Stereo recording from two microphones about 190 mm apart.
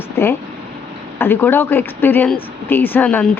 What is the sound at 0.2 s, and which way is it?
Speech, 15° left (ahead or behind).